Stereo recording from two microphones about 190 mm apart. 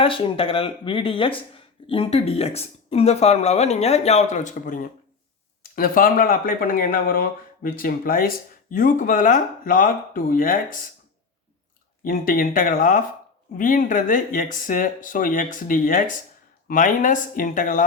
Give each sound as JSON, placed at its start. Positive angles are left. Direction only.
{"t": 0.0, "sound": "speech", "side_deg": 25}
{"t": 12.0, "sound": "speech", "side_deg": 50}